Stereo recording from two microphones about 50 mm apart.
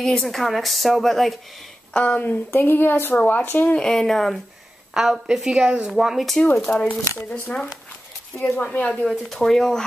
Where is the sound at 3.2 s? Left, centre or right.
Left.